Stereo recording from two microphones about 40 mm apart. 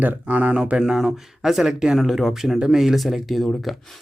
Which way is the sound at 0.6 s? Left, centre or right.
Centre.